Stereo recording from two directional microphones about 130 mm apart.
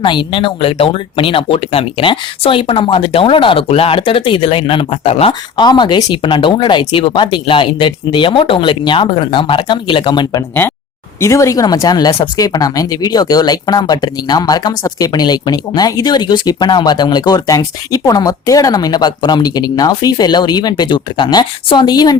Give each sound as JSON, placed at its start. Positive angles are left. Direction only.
{"t": 0.0, "sound": "speech", "side_deg": 40}
{"t": 5.3, "sound": "speech", "side_deg": 35}
{"t": 11.2, "sound": "speech", "side_deg": 25}